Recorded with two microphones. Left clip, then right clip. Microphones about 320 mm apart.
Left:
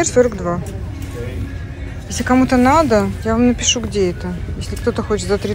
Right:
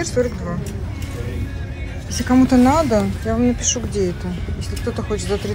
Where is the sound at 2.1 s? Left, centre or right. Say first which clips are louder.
Left 1 dB; centre.